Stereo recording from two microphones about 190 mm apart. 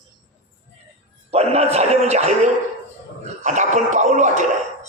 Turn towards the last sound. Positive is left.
turn(degrees=-40)  # may be behind; listen again after turning